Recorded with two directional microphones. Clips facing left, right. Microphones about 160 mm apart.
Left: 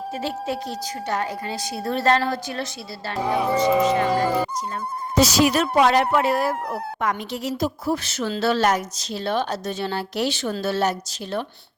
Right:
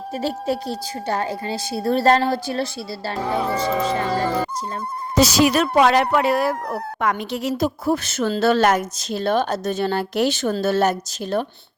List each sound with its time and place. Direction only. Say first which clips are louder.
0.1 s a woman's voice: right 5 dB; 40° right (ahead or behind)
3.2 s speech: left 2 dB; 10° left (ahead or behind)
5.1 s a woman's voice: right 2 dB; 85° right; by 11.4 s 45° right (ahead or behind)